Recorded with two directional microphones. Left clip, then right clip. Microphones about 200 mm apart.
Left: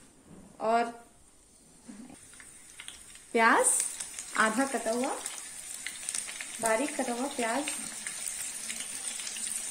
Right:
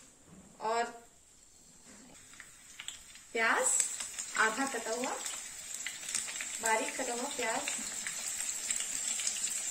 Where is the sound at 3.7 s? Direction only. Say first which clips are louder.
Left 1 dB; centre (ahead or behind).